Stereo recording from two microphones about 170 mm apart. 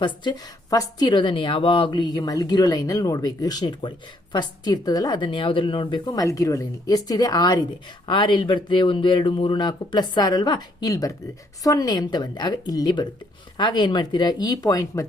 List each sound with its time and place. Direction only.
0.0 s a woman's voice: 25° left (ahead or behind)